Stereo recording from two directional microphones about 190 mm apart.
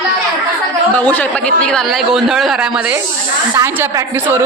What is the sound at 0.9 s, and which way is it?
A man's voice, 10° left (ahead or behind).